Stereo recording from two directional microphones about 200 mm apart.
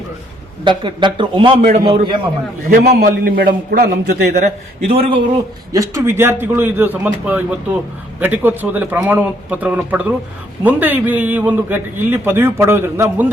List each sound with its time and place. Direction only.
0.6 s speech: 25° right (ahead or behind)
2.6 s a man's voice: 50° right (ahead or behind)
4.9 s speech: 30° right (ahead or behind)
5.7 s a man's voice: 15° right (ahead or behind)